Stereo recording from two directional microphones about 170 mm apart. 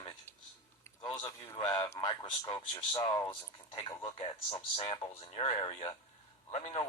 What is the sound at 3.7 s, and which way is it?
Speech, 35° left (ahead or behind).